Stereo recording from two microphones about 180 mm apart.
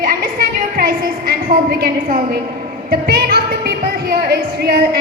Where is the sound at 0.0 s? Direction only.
55° right (ahead or behind).